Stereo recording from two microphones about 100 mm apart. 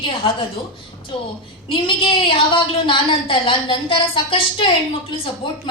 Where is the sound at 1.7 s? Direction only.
60° left (ahead or behind).